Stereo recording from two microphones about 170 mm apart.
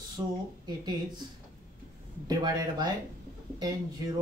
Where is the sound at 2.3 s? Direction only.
25° right (ahead or behind).